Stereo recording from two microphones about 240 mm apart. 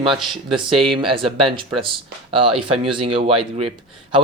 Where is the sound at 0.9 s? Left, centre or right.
Right.